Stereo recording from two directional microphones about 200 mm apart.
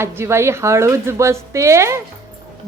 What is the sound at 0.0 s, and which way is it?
A woman's voice, 10° right (ahead or behind).